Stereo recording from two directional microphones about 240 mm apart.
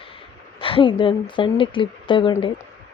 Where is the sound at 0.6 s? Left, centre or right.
Left.